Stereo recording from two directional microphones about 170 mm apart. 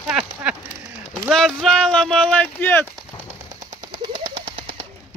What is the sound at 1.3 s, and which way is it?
Speech, 5° left (ahead or behind).